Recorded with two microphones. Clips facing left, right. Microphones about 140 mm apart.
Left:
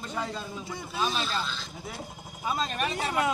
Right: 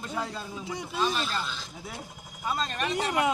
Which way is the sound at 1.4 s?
10° right (ahead or behind).